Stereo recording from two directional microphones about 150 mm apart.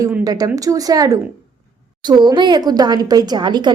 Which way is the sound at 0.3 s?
25° right (ahead or behind).